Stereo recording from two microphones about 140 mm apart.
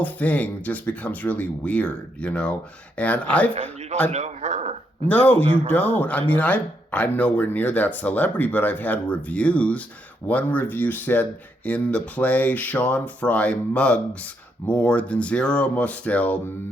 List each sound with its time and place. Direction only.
0.0 s speech: 10° left (ahead or behind)
4.1 s a sound: 55° right (ahead or behind)
5.0 s speech: 10° left (ahead or behind)